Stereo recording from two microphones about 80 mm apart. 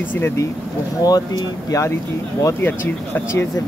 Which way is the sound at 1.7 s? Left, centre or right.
Left.